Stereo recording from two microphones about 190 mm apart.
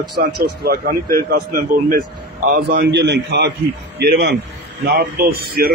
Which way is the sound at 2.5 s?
60° right (ahead or behind).